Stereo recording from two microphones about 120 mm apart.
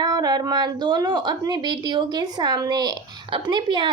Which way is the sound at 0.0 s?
30° right (ahead or behind).